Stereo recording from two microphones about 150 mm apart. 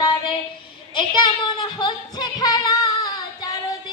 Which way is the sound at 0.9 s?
30° left (ahead or behind).